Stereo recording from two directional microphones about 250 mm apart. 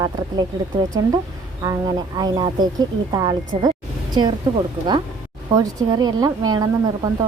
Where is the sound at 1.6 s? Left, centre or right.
Centre.